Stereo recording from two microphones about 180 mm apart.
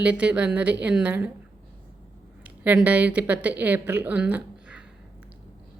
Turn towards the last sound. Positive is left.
turn(degrees=-5)  # may be behind; listen again after turning